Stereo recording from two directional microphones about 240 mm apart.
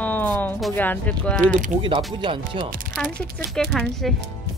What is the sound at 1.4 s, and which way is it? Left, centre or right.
Speech, right.